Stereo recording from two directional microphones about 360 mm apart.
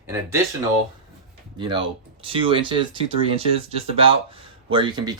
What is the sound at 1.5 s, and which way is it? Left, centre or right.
Speech, centre.